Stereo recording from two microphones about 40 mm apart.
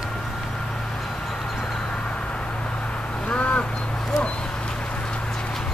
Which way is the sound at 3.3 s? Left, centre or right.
Left.